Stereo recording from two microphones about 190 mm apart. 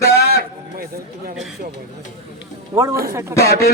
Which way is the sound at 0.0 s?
55° left (ahead or behind).